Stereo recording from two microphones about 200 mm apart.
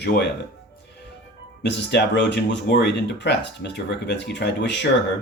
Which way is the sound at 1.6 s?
60° left (ahead or behind).